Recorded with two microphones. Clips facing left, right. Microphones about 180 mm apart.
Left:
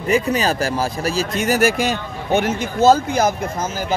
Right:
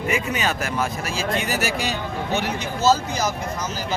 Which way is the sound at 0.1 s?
35° left (ahead or behind).